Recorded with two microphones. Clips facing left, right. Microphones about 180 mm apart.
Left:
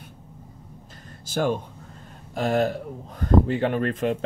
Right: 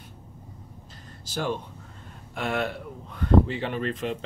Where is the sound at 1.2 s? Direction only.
50° left (ahead or behind).